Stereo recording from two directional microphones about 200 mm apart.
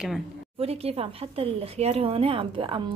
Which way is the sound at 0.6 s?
30° right (ahead or behind).